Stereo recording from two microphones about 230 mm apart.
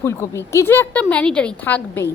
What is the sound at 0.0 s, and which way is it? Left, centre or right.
A woman's voice, centre.